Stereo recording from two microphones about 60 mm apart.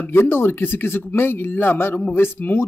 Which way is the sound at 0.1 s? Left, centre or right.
Left.